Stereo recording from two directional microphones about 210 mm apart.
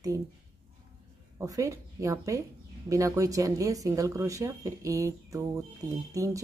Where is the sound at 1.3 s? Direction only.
15° right (ahead or behind).